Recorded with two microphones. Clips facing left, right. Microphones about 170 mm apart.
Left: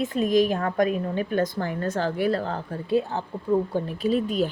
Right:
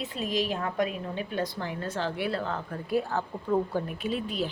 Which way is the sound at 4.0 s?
40° left (ahead or behind).